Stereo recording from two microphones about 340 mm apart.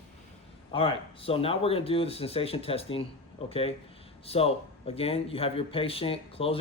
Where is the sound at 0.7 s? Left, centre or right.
Centre.